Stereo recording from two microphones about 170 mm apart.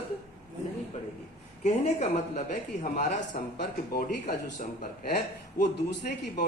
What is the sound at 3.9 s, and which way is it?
Speech, 60° left (ahead or behind).